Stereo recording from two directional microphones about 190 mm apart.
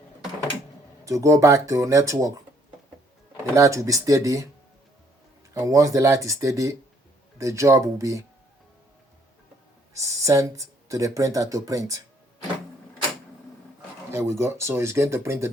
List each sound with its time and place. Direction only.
1.0 s speech: 15° right (ahead or behind)
3.5 s speech: 15° right (ahead or behind)
5.5 s speech: 15° right (ahead or behind)
9.9 s speech: 15° right (ahead or behind)
14.1 s speech: 15° right (ahead or behind)